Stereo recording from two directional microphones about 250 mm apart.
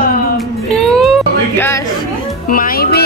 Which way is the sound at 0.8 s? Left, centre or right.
Centre.